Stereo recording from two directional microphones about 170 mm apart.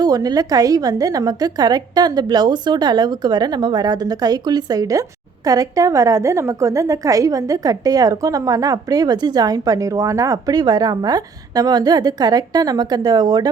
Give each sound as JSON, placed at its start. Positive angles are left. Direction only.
{"t": 0.0, "sound": "a woman's voice", "side_deg": -25}